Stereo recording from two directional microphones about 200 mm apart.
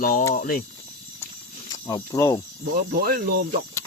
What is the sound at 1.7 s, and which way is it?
Speech, 15° left (ahead or behind).